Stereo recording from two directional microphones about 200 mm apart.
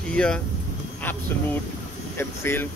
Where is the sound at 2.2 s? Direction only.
10° left (ahead or behind).